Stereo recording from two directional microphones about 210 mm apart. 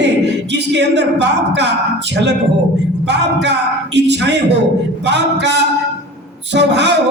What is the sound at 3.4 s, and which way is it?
A man's voice, 55° right (ahead or behind).